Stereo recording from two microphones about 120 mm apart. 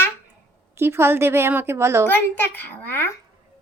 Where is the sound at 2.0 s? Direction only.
15° left (ahead or behind).